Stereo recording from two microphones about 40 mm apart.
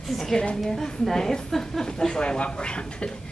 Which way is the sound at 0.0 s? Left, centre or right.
Centre.